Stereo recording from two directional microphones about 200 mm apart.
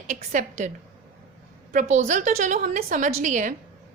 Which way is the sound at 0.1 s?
40° right (ahead or behind).